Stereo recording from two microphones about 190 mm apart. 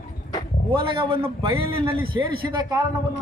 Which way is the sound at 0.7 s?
25° right (ahead or behind).